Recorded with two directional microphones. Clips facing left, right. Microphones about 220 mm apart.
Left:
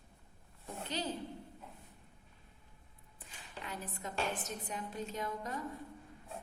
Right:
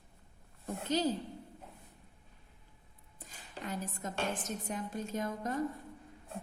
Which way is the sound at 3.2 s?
40° right (ahead or behind).